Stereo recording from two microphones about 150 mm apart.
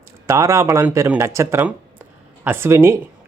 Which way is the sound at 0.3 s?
20° right (ahead or behind).